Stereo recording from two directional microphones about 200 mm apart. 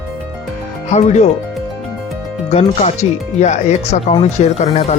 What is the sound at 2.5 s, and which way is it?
Speech, 35° left (ahead or behind).